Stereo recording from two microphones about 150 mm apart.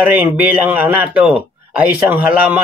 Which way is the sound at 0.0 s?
10° right (ahead or behind).